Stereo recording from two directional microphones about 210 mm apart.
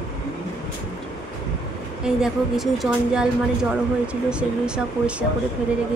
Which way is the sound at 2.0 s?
Centre (ahead or behind).